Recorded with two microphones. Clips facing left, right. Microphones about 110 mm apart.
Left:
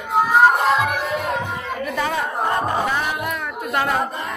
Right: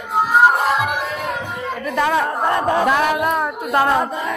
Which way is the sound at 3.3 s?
35° right (ahead or behind).